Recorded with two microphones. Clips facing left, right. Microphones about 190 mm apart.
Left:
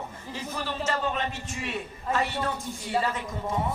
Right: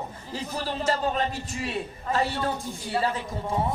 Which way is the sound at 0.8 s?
35° right (ahead or behind).